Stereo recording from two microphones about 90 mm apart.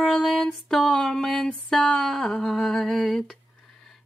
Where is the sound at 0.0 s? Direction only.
5° left (ahead or behind).